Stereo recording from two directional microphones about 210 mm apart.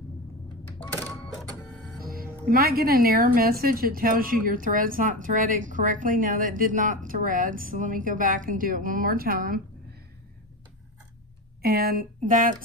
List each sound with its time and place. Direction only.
2.0 s music: 45° right (ahead or behind)
2.5 s a woman's voice: 45° right (ahead or behind)
11.6 s speech: 45° right (ahead or behind)